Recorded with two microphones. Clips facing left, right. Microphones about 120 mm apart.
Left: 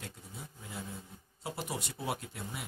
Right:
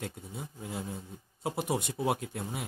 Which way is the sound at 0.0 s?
60° right (ahead or behind).